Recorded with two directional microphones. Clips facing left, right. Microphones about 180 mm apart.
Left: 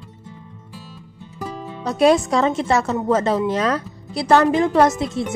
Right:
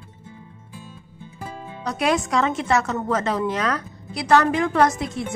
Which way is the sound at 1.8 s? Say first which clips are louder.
Left 7 dB; 30° left (ahead or behind).